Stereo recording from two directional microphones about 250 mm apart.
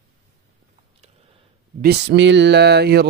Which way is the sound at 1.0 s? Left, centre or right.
Right.